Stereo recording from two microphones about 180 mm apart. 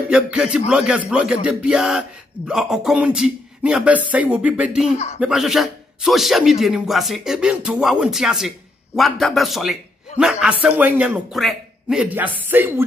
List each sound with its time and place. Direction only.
0.1 s a man's voice: 5° right (ahead or behind)
4.9 s speech: 35° left (ahead or behind)
5.2 s a man's voice: centre (ahead or behind)